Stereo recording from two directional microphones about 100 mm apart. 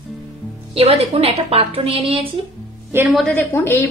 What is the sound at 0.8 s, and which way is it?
A woman's voice, 90° right.